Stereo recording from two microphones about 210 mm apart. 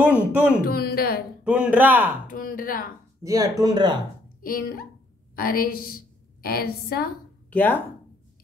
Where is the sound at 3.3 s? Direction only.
15° right (ahead or behind).